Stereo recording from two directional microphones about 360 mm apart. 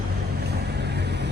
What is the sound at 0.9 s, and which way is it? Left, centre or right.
Vehicle, right.